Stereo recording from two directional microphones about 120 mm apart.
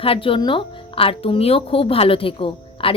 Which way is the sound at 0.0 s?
50° left (ahead or behind).